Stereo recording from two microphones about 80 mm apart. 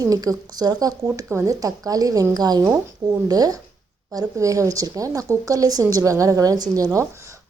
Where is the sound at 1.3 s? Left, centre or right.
Right.